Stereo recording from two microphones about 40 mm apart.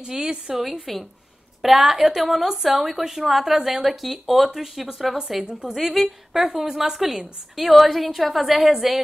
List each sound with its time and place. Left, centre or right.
0.0 s a woman's voice: centre
0.9 s a woman's voice: centre
1.6 s a woman's voice: centre
5.4 s a woman's voice: right
5.8 s a woman's voice: centre